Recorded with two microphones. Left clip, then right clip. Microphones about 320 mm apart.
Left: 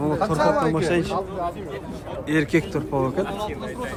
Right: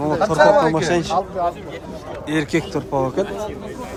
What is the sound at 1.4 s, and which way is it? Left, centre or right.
Speech, right.